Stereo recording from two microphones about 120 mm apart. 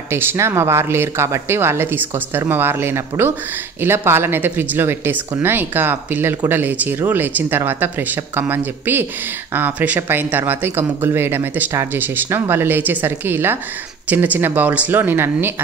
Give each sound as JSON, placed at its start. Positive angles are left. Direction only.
{"t": 0.1, "sound": "speech", "side_deg": -20}